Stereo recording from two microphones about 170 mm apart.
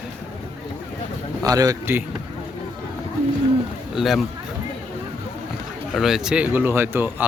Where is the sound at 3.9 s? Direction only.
Centre (ahead or behind).